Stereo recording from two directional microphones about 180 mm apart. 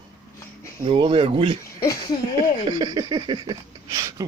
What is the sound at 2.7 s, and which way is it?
Speech, 20° right (ahead or behind).